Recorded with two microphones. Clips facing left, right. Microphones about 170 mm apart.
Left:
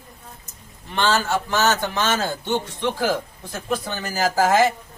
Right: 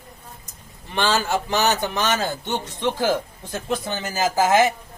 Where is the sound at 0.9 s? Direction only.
15° right (ahead or behind).